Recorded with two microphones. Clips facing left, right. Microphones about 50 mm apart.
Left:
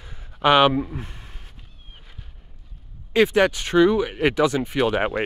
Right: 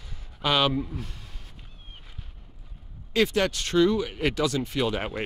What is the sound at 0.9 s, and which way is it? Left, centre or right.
Speech, left.